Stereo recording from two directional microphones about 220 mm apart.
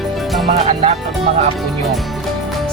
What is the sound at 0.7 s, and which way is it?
Speech, 30° right (ahead or behind).